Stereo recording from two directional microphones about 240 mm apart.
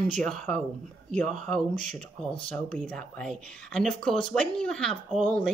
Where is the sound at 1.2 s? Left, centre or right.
Right.